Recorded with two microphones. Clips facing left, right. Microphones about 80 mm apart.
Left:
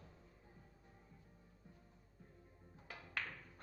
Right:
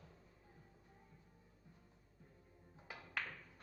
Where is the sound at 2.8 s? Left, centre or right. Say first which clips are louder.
Right 1 dB; centre.